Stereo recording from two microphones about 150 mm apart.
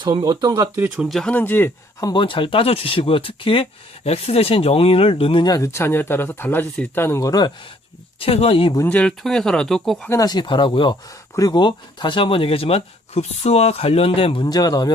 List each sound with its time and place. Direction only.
0.0 s speech: 25° right (ahead or behind)
0.9 s speech: centre (ahead or behind); by 7.5 s 25° left (ahead or behind)
8.2 s speech: 40° left (ahead or behind)
8.9 s speech: 5° left (ahead or behind)
10.1 s speech: 25° left (ahead or behind)
14.4 s speech: 25° left (ahead or behind)